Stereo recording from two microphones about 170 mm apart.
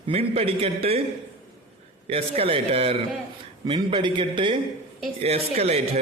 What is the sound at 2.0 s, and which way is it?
A man's voice, 35° right (ahead or behind).